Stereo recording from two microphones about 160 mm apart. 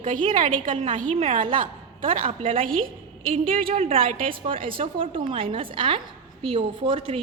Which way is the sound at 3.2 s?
35° right (ahead or behind).